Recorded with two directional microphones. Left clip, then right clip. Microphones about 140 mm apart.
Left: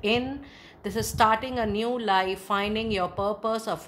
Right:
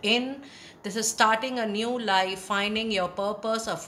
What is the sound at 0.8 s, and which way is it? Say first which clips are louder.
A woman's voice: left 1 dB; 45° left (ahead or behind).